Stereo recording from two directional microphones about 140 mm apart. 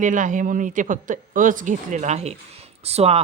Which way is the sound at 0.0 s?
65° right (ahead or behind).